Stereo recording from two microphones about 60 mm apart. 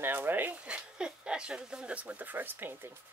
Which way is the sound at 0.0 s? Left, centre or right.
Right.